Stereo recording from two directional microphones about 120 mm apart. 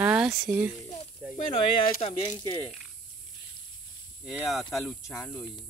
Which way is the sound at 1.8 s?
55° left (ahead or behind).